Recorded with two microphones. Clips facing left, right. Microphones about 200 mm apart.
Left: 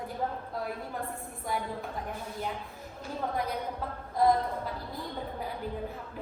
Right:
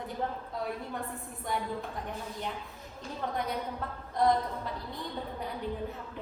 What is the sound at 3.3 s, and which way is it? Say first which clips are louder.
A woman's voice: left 1 dB; centre (ahead or behind).